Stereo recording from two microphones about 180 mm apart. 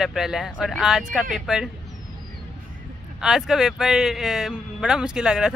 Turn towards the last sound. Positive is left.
turn(degrees=-5)  # may be behind; listen again after turning